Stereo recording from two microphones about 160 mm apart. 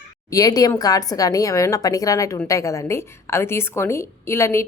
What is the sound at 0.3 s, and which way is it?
A woman's voice, 20° left (ahead or behind).